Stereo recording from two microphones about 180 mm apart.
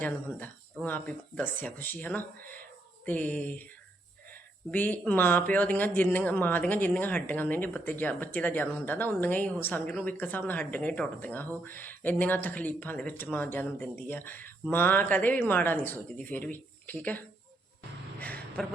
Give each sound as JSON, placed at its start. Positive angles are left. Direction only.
{"t": 0.0, "sound": "speech", "side_deg": 10}
{"t": 4.7, "sound": "speech", "side_deg": 10}
{"t": 18.2, "sound": "a sound", "side_deg": 10}